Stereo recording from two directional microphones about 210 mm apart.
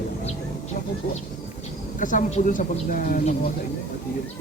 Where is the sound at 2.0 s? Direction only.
40° left (ahead or behind).